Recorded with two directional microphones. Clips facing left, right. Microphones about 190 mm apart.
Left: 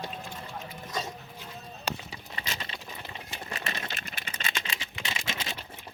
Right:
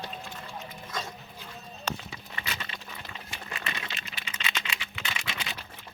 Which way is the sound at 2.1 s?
30° left (ahead or behind).